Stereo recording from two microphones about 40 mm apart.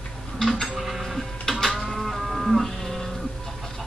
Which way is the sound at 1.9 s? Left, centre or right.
Centre.